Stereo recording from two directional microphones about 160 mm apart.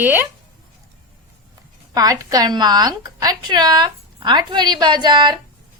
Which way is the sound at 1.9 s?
20° right (ahead or behind).